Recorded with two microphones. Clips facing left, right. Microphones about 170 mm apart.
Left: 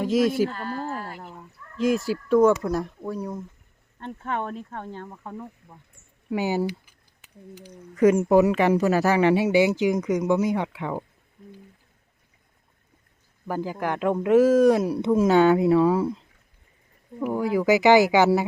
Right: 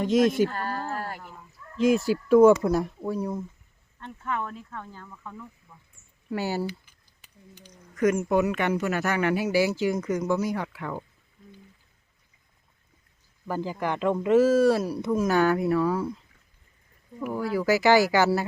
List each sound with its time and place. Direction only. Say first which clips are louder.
0.0 s speech: even; 5° left (ahead or behind)
0.5 s a sound: left 1 dB; 45° right (ahead or behind)
1.7 s speech: right 1 dB; centre (ahead or behind)
4.0 s speech: left 2 dB; 35° left (ahead or behind)
5.1 s speech: left 5 dB; 40° left (ahead or behind)
6.3 s speech: left 4 dB; 15° left (ahead or behind)
8.0 s speech: left 5 dB; 35° left (ahead or behind)
13.5 s speech: left 1 dB; 10° left (ahead or behind); by 16.1 s 25° left (ahead or behind)
17.3 s speech: left 3 dB; 20° left (ahead or behind)